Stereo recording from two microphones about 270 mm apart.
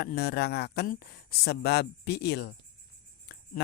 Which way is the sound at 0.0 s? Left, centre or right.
Left.